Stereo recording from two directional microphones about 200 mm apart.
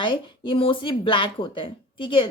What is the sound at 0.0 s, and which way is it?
Speech, 25° left (ahead or behind).